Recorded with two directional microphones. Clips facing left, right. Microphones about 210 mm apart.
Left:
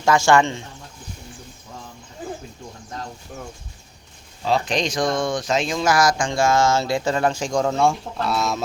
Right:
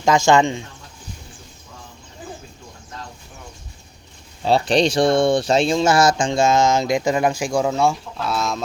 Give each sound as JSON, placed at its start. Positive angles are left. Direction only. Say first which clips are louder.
{"t": 0.0, "sound": "speech", "louder": "right 1 dB", "side_deg": -20}
{"t": 4.4, "sound": "speech", "louder": "right 5 dB", "side_deg": -30}